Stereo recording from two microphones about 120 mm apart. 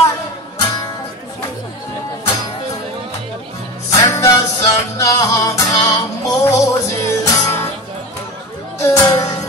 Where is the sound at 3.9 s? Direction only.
25° left (ahead or behind).